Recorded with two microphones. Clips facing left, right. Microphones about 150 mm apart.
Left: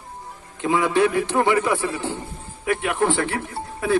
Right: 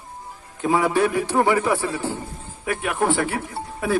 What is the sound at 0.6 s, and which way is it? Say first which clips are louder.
A man's voice: even; 10° right (ahead or behind).